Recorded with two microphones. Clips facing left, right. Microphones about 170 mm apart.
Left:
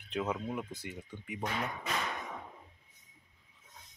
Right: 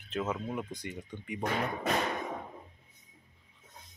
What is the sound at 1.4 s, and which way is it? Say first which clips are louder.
Speech: right 5 dB; 50° right (ahead or behind).